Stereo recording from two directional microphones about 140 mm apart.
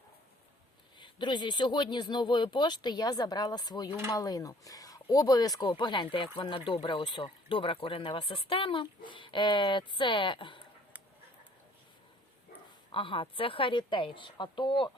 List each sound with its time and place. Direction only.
0.9 s speech: 35° left (ahead or behind)
12.9 s speech: 40° left (ahead or behind)